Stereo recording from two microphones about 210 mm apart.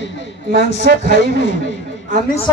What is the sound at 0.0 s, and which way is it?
Speech, 60° left (ahead or behind).